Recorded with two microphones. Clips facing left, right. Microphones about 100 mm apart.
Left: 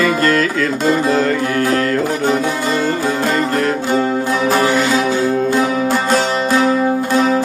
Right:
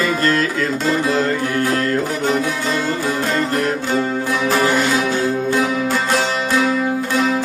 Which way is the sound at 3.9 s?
30° left (ahead or behind).